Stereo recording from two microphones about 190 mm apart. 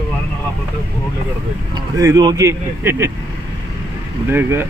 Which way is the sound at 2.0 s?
20° right (ahead or behind).